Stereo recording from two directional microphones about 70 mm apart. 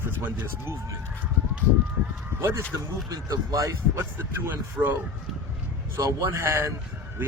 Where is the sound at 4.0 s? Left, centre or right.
Right.